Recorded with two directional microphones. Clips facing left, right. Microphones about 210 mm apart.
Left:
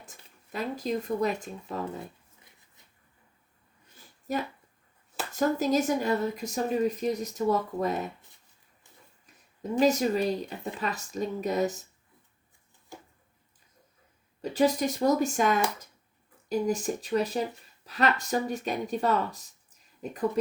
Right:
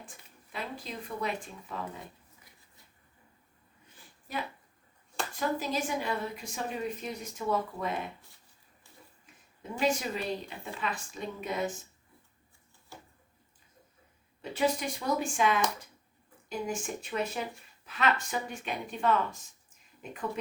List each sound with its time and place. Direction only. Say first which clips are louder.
0.5 s speech: left 9 dB; 40° left (ahead or behind)
4.3 s speech: left 6 dB; 40° left (ahead or behind)
9.7 s speech: left 7 dB; 40° left (ahead or behind)
14.4 s speech: left 5 dB; 40° left (ahead or behind)